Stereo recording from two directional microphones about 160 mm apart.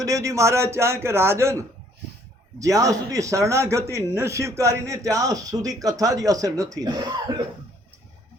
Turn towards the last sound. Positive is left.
turn(degrees=-25)  # may be behind; listen again after turning